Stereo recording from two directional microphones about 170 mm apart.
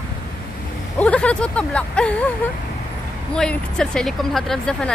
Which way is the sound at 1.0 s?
5° left (ahead or behind).